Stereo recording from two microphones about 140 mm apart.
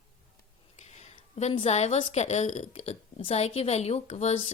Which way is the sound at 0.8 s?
55° left (ahead or behind).